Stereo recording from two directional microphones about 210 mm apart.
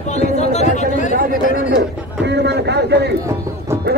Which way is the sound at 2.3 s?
55° right (ahead or behind).